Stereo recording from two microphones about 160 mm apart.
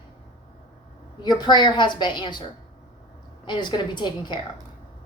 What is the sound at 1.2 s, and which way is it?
A woman's voice, 25° left (ahead or behind).